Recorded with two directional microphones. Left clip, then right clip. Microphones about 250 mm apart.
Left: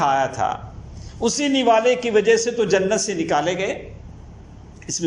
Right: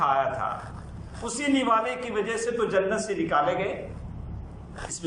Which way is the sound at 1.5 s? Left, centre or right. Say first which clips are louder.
Left 8 dB; left.